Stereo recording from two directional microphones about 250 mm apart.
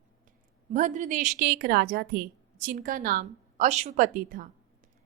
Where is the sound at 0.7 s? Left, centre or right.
Right.